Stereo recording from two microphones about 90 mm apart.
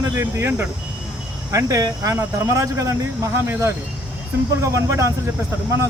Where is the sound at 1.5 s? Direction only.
40° right (ahead or behind).